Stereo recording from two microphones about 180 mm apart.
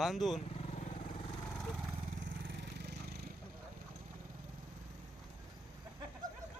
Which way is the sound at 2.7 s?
70° right (ahead or behind).